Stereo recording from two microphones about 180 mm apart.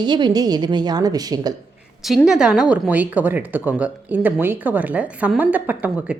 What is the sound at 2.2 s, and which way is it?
Speech, 5° right (ahead or behind).